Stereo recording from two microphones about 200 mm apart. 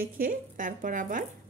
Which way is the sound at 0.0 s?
45° right (ahead or behind).